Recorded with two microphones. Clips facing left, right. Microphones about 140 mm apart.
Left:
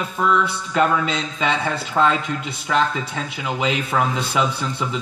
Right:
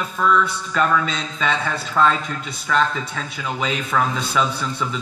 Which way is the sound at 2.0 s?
30° left (ahead or behind).